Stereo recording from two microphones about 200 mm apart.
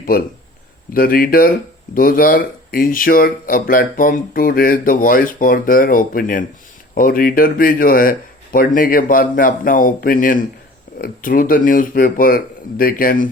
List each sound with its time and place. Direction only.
0.9 s speech: 45° left (ahead or behind)